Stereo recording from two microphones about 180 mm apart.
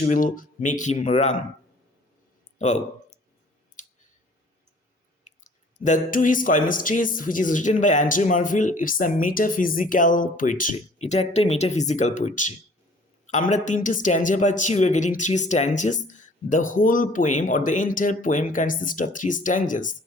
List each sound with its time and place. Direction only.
0.0 s speech: 45° left (ahead or behind)
2.6 s a sound: 40° left (ahead or behind)
3.8 s clicking: 45° left (ahead or behind)
5.2 s speech: 45° left (ahead or behind)